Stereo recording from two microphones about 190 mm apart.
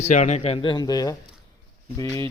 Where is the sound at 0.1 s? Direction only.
35° left (ahead or behind); by 1.1 s 20° left (ahead or behind).